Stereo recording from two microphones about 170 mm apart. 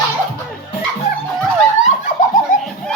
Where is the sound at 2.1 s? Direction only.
50° left (ahead or behind).